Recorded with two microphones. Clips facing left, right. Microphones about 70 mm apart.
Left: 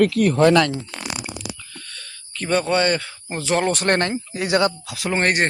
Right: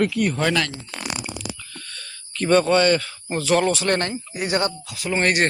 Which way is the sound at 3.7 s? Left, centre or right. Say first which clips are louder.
Left 2 dB; left.